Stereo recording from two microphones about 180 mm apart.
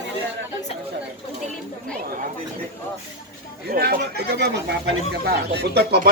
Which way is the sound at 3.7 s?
60° right (ahead or behind).